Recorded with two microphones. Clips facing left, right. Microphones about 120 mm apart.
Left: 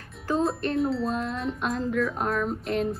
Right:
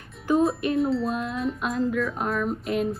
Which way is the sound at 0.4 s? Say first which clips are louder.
Right 1 dB; 5° right (ahead or behind).